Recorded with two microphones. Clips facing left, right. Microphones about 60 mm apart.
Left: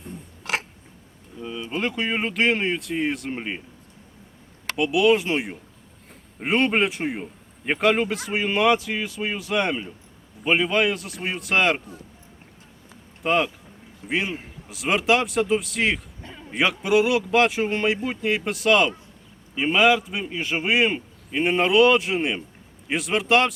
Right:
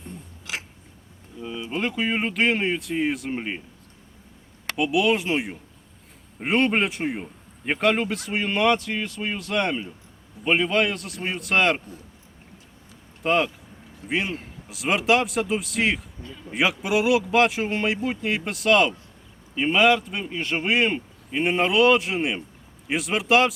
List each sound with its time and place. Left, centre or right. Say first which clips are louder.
0.4 s a sound: left 6 dB; left
1.4 s a man's voice: even; centre
4.8 s a man's voice: left 3 dB; centre
13.2 s a man's voice: even; centre